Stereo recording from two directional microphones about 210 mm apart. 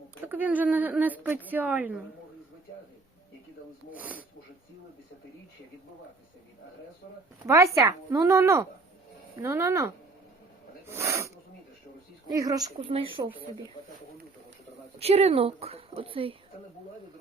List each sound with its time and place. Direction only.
0.3 s a woman's voice: 10° right (ahead or behind)
3.9 s a woman's voice: 5° right (ahead or behind)
7.4 s a woman's voice: 15° right (ahead or behind)
12.3 s a woman's voice: 15° right (ahead or behind)
14.9 s speech: 30° right (ahead or behind)